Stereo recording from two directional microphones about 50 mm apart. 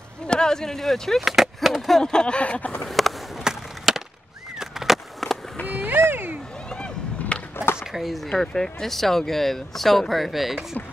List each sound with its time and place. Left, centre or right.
0.3 s speech: centre
1.2 s speech: centre
2.0 s speech: centre
3.4 s skateboard: centre
4.6 s a sound: centre
5.7 s a sound: right
6.7 s vehicle: left
7.5 s chop: left
7.8 s speech: centre
8.3 s speech: centre